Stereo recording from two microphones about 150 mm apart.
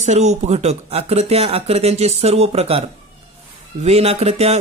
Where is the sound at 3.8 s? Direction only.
45° right (ahead or behind).